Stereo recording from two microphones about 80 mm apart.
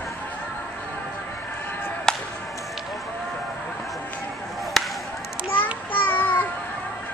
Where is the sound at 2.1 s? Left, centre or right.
Centre.